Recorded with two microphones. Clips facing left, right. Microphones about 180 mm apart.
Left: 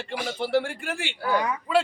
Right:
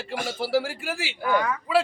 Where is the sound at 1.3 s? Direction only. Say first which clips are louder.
Right 1 dB; 20° left (ahead or behind).